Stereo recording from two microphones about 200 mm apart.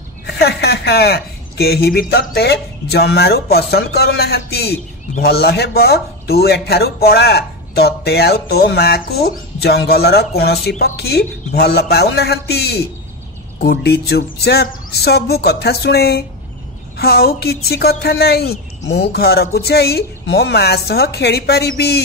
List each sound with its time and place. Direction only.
0.4 s speech: 55° left (ahead or behind)